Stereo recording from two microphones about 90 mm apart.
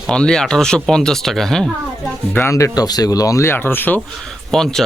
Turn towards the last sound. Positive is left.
turn(degrees=5)  # may be behind; listen again after turning